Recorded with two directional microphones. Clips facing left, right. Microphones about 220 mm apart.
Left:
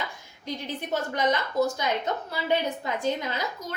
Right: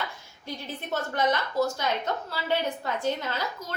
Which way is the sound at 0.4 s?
15° left (ahead or behind).